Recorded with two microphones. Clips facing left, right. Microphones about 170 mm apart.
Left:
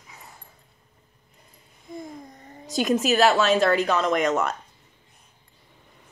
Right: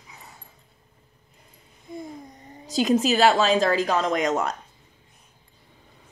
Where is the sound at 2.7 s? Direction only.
30° right (ahead or behind).